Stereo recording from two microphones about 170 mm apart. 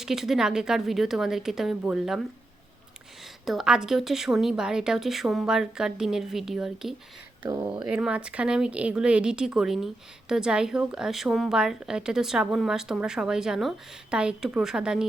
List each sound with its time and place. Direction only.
0.0 s a woman's voice: centre (ahead or behind)
3.4 s a woman's voice: centre (ahead or behind)
7.4 s speech: 20° right (ahead or behind)
7.7 s a woman's voice: 5° right (ahead or behind)